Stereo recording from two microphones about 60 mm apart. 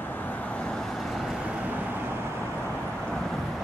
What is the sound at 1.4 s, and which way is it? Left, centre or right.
Vehicle, right.